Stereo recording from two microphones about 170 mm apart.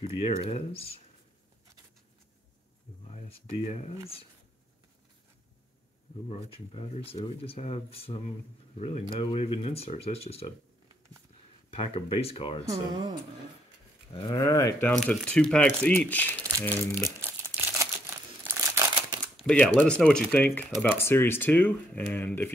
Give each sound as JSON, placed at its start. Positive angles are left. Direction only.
{"t": 0.1, "sound": "speech", "side_deg": 35}
{"t": 3.3, "sound": "speech", "side_deg": 40}
{"t": 6.2, "sound": "speech", "side_deg": 35}
{"t": 11.7, "sound": "speech", "side_deg": 35}
{"t": 12.6, "sound": "speech", "side_deg": -30}
{"t": 14.1, "sound": "speech", "side_deg": 25}
{"t": 14.9, "sound": "speech", "side_deg": 5}
{"t": 17.2, "sound": "crumpling", "side_deg": -15}
{"t": 19.3, "sound": "speech", "side_deg": 5}